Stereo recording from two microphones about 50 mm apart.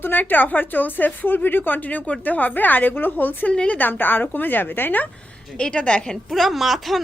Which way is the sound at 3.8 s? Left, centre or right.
Left.